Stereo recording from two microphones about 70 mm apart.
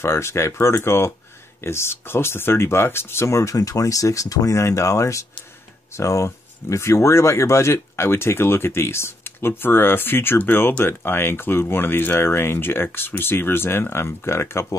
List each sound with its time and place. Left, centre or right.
0.0 s speech: left